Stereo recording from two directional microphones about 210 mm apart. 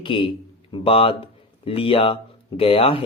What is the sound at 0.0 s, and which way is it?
Speech, 25° left (ahead or behind).